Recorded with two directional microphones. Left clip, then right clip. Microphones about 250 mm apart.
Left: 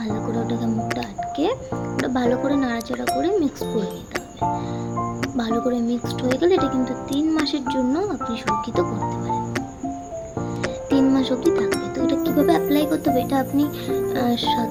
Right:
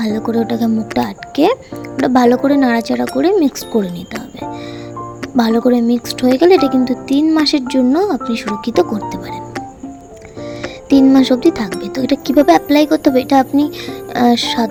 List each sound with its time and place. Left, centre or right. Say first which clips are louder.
0.0 s speech: right 8 dB; right
5.4 s speech: right 11 dB; right
10.8 s speech: right 10 dB; right